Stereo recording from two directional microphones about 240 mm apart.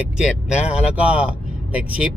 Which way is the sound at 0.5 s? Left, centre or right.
Left.